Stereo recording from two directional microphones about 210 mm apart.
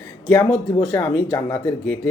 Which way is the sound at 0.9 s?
15° left (ahead or behind).